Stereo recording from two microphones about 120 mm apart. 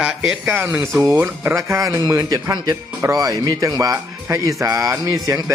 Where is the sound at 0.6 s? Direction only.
25° right (ahead or behind).